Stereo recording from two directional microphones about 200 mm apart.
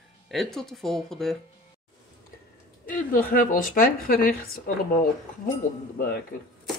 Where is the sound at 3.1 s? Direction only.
45° left (ahead or behind).